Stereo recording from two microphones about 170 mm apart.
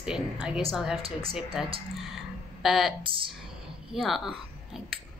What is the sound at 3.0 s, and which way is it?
Speech, 30° right (ahead or behind).